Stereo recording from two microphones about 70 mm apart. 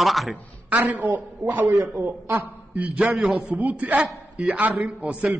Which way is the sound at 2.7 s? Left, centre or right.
Centre.